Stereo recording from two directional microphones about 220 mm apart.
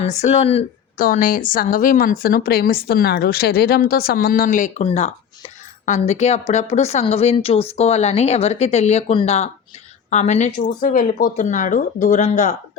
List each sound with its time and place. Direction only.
0.0 s a woman's voice: 30° left (ahead or behind)